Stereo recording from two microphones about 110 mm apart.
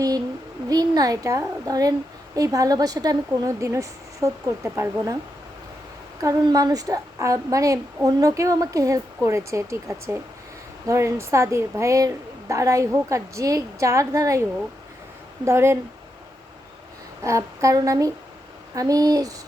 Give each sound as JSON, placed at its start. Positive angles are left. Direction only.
{"t": 0.7, "sound": "a woman's voice", "side_deg": -35}
{"t": 6.2, "sound": "a woman's voice", "side_deg": -35}
{"t": 15.4, "sound": "a woman's voice", "side_deg": -25}
{"t": 17.2, "sound": "a woman's voice", "side_deg": -25}